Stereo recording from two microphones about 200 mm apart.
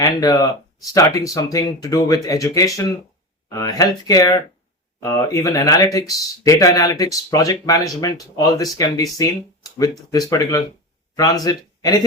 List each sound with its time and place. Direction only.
0.0 s speech: 15° left (ahead or behind)